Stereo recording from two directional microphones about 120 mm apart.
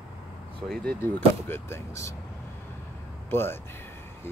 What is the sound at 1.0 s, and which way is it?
Speech, 20° left (ahead or behind).